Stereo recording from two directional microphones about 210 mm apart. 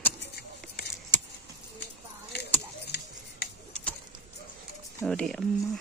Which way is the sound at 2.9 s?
50° left (ahead or behind).